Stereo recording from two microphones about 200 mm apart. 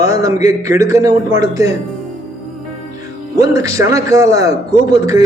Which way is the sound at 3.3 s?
15° right (ahead or behind).